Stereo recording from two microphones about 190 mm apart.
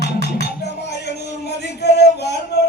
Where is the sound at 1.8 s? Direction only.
60° left (ahead or behind).